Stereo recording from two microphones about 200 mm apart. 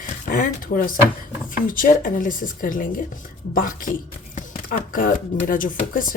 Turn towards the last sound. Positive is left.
turn(degrees=45)  # may be behind; listen again after turning